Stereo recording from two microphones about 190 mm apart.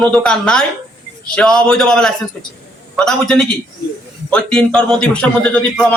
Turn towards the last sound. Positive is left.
turn(degrees=5)  # may be behind; listen again after turning